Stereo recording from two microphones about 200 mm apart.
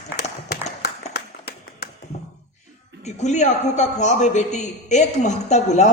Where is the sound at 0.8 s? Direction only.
55° left (ahead or behind).